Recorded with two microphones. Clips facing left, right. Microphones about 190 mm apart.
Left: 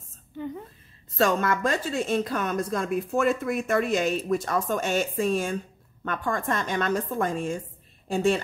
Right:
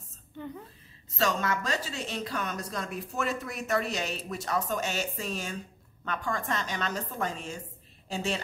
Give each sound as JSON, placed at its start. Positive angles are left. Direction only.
{"t": 1.1, "sound": "a woman's voice", "side_deg": 55}